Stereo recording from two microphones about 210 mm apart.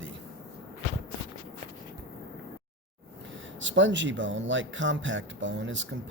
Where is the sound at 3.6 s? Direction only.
60° right (ahead or behind).